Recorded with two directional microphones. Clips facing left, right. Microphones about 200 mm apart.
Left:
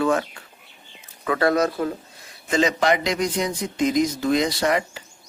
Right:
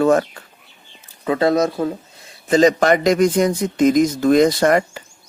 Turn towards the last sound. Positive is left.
turn(degrees=-50)  # may be behind; listen again after turning